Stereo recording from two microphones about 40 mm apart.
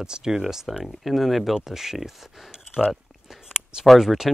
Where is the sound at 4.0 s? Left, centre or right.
Centre.